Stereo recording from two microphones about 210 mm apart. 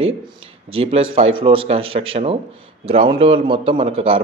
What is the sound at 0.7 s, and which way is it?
Speech, 25° right (ahead or behind).